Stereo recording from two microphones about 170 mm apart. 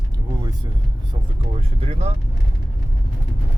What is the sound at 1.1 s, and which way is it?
Speech, 35° right (ahead or behind).